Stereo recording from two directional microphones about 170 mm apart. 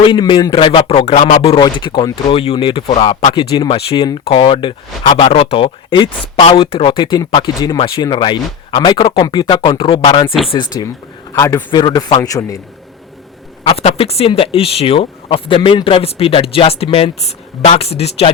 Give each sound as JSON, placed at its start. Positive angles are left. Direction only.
{"t": 0.0, "sound": "speech", "side_deg": 25}
{"t": 13.8, "sound": "speech", "side_deg": 35}